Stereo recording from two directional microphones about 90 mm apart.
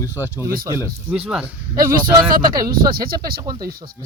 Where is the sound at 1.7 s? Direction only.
45° right (ahead or behind).